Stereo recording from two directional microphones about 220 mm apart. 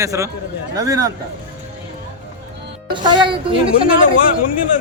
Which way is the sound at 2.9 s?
20° right (ahead or behind).